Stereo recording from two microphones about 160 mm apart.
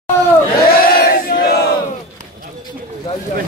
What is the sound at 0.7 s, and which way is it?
Crowd, 70° left (ahead or behind).